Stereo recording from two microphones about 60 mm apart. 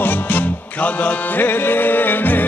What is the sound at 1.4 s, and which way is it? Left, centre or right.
Music, left.